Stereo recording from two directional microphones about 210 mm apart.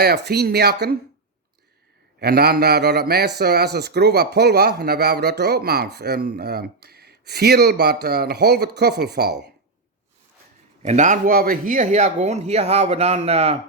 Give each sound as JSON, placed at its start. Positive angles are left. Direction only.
{"t": 0.0, "sound": "a man's voice", "side_deg": -50}
{"t": 2.2, "sound": "a man's voice", "side_deg": -50}
{"t": 10.8, "sound": "speech", "side_deg": -35}